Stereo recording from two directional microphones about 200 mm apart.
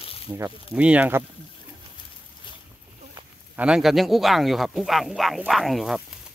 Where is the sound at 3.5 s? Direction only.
5° right (ahead or behind).